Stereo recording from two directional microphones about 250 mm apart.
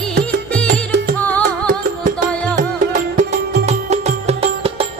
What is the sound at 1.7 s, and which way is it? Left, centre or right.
Music, right.